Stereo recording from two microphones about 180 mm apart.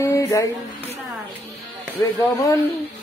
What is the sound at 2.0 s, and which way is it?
Female singing, 15° left (ahead or behind).